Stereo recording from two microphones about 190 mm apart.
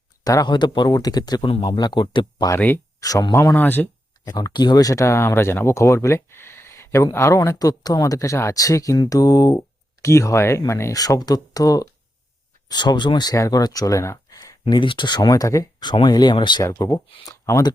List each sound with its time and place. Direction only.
0.3 s speech: 20° left (ahead or behind)
2.6 s speech: 10° left (ahead or behind)
4.3 s speech: 20° left (ahead or behind)
17.1 s speech: 25° left (ahead or behind)
17.4 s speech: 15° left (ahead or behind)